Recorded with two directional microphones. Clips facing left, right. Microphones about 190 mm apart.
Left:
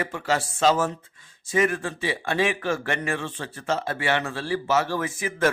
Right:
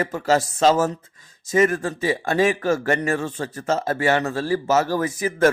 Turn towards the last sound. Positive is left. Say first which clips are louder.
# right 5 dB
turn(degrees=-40)  # may be behind; listen again after turning